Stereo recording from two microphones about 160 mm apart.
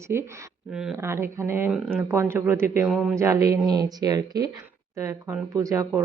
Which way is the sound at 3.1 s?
20° right (ahead or behind).